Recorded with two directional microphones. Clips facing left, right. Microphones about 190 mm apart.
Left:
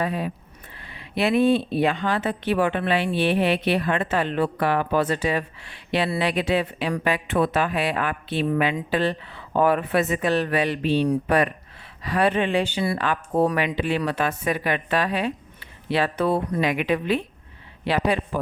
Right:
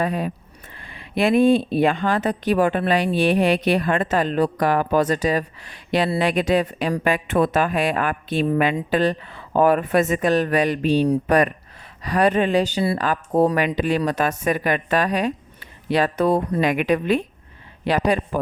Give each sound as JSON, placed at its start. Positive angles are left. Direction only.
{"t": 0.0, "sound": "speech", "side_deg": -45}